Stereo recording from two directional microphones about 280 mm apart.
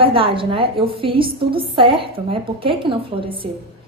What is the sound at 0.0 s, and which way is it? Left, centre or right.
A woman's voice, centre.